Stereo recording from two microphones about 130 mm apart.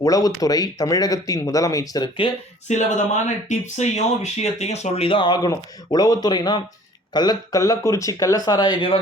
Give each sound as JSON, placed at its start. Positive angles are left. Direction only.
{"t": 0.0, "sound": "speech", "side_deg": 25}
{"t": 2.6, "sound": "speech", "side_deg": 65}